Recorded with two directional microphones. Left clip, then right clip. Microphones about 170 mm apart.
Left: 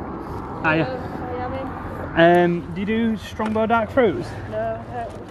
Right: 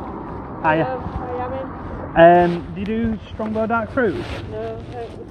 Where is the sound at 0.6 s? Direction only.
25° left (ahead or behind).